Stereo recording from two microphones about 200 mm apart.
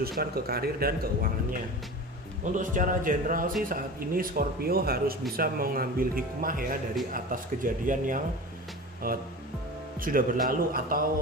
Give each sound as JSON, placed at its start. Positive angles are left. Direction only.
{"t": 0.2, "sound": "speech", "side_deg": -50}
{"t": 2.4, "sound": "speech", "side_deg": -40}